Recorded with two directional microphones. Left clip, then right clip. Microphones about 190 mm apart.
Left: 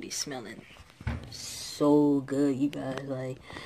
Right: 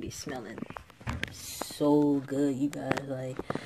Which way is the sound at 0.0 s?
40° right (ahead or behind).